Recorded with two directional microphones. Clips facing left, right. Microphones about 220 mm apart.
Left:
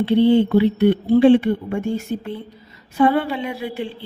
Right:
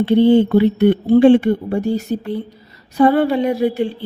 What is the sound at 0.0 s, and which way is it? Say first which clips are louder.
Speech: right 3 dB; 45° right (ahead or behind).